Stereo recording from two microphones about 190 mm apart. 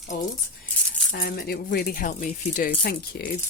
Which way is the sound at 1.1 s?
50° left (ahead or behind).